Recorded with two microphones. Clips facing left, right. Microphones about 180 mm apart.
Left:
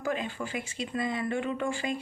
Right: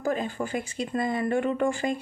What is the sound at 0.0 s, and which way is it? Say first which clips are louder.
Speech: right 4 dB; 40° right (ahead or behind).